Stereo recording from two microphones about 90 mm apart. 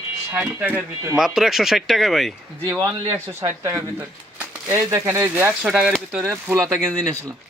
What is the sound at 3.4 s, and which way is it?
Speech, 35° right (ahead or behind).